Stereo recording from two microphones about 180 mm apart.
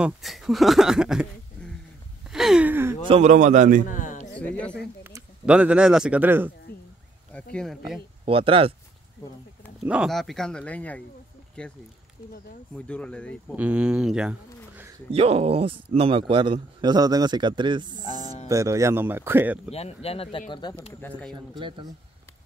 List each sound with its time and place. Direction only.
0.0 s speech: centre (ahead or behind)
2.2 s a sound: 5° right (ahead or behind)
3.1 s a man's voice: 40° right (ahead or behind)
3.9 s a sound: 45° left (ahead or behind)
4.4 s speech: 5° left (ahead or behind)
5.0 s speech: 10° right (ahead or behind)
7.5 s speech: centre (ahead or behind)
8.3 s a man's voice: 30° right (ahead or behind)
9.8 s speech: 5° right (ahead or behind)
12.7 s speech: 5° left (ahead or behind)
13.6 s speech: 5° right (ahead or behind)
15.0 s a man's voice: 35° right (ahead or behind); by 19.6 s 10° right (ahead or behind)
19.7 s speech: 35° left (ahead or behind)
21.3 s a man's voice: 25° right (ahead or behind)